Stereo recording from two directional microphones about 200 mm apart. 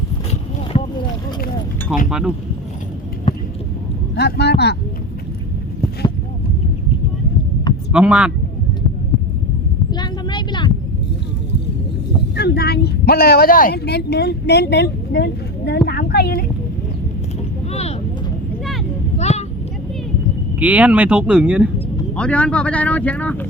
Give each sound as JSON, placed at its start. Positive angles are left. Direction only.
{"t": 0.7, "sound": "boat", "side_deg": 35}
{"t": 2.0, "sound": "speech", "side_deg": -5}
{"t": 4.1, "sound": "a man's voice", "side_deg": 55}
{"t": 7.9, "sound": "speech", "side_deg": -5}
{"t": 9.9, "sound": "a sound", "side_deg": 20}
{"t": 12.4, "sound": "speech", "side_deg": 55}
{"t": 17.7, "sound": "vehicle", "side_deg": 30}
{"t": 19.2, "sound": "a sound", "side_deg": 35}
{"t": 20.6, "sound": "speech", "side_deg": -5}
{"t": 22.1, "sound": "a man's voice", "side_deg": 5}